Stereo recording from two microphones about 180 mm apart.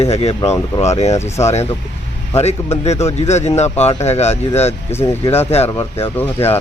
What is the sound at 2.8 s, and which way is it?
Speech, 35° left (ahead or behind).